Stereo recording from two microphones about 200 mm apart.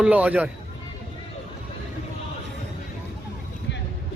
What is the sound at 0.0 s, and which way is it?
Speech, 5° right (ahead or behind).